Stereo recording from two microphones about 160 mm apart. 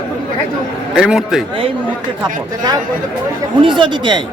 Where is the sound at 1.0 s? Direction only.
5° right (ahead or behind).